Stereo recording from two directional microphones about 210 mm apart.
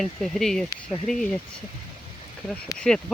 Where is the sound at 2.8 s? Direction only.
5° left (ahead or behind).